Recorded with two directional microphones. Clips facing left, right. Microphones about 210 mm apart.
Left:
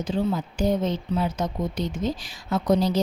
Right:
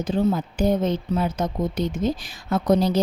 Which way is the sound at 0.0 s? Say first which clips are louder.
Right 3 dB; 55° right (ahead or behind).